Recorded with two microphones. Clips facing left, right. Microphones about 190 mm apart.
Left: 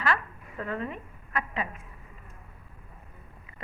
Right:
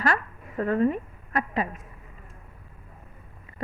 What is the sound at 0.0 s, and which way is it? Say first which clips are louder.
A woman's voice: right 3 dB; 40° right (ahead or behind).